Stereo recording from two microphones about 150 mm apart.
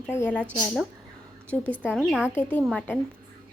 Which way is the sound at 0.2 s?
10° left (ahead or behind).